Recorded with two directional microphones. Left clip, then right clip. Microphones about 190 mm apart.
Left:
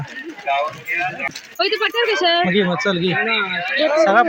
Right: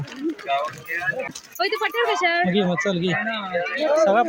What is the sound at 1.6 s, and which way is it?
Speech, 30° left (ahead or behind).